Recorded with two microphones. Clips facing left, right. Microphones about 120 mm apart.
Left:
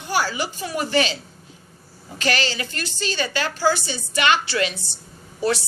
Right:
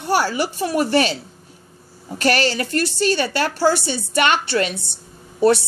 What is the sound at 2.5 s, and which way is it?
A woman's voice, 55° right (ahead or behind).